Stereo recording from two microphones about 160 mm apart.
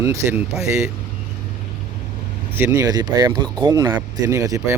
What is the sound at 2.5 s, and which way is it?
Speech, 15° right (ahead or behind).